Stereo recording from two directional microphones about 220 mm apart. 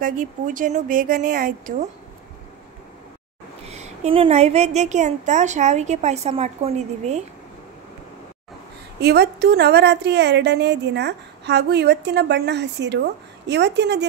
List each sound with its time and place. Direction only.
0.0 s a woman's voice: 35° right (ahead or behind)
3.6 s a woman's voice: 30° right (ahead or behind)
9.0 s speech: 50° right (ahead or behind)